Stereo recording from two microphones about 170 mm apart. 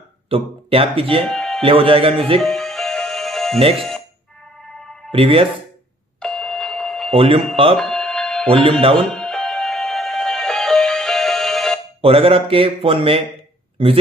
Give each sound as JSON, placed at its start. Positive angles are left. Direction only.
{"t": 0.3, "sound": "speech", "side_deg": -35}
{"t": 1.3, "sound": "music", "side_deg": 0}
{"t": 1.6, "sound": "speech", "side_deg": -30}
{"t": 2.4, "sound": "music", "side_deg": 0}
{"t": 3.7, "sound": "speech", "side_deg": 0}
{"t": 5.1, "sound": "speech", "side_deg": -35}
{"t": 6.1, "sound": "doorbell", "side_deg": 5}
{"t": 7.1, "sound": "speech", "side_deg": -30}
{"t": 7.7, "sound": "alarm clock", "side_deg": 0}
{"t": 8.5, "sound": "speech", "side_deg": -35}
{"t": 9.1, "sound": "music", "side_deg": 0}
{"t": 12.0, "sound": "speech", "side_deg": -35}